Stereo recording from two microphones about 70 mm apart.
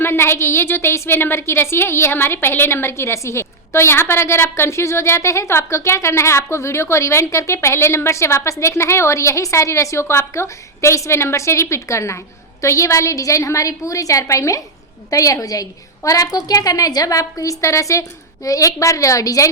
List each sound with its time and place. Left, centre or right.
0.0 s a woman's voice: left